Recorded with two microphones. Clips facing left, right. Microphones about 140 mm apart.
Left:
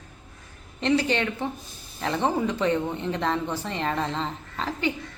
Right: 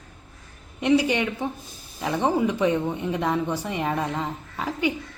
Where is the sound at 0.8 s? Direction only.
10° right (ahead or behind).